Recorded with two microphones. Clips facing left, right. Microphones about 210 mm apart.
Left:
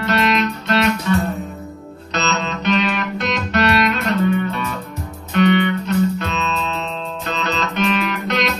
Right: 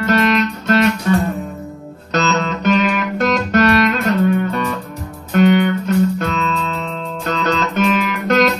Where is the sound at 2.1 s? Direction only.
45° right (ahead or behind).